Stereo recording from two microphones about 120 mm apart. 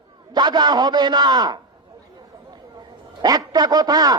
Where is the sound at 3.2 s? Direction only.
35° right (ahead or behind).